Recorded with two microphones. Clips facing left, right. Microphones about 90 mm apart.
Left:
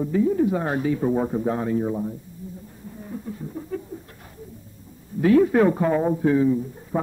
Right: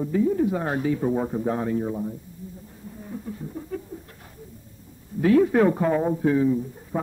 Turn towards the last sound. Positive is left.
turn(degrees=20)  # may be behind; listen again after turning